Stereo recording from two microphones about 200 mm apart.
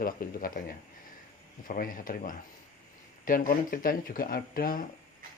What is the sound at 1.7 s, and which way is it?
Speech, 45° left (ahead or behind).